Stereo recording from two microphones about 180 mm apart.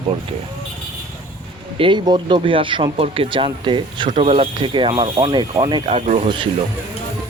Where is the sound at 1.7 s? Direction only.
30° right (ahead or behind).